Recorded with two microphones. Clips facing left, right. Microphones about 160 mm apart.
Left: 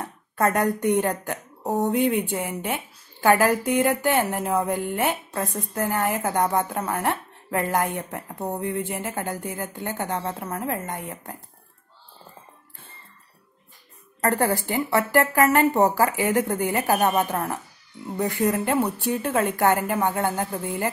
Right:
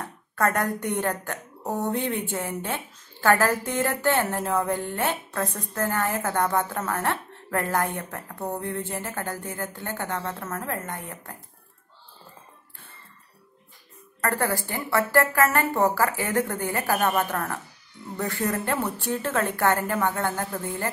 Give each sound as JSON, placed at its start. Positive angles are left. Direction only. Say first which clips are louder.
{"t": 0.0, "sound": "a woman's voice", "louder": "left 2 dB", "side_deg": 20}
{"t": 14.2, "sound": "a woman's voice", "louder": "left 4 dB", "side_deg": 20}